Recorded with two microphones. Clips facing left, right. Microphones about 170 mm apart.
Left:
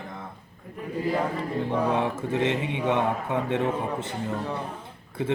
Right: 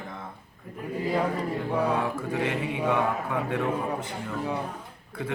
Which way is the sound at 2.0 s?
25° left (ahead or behind).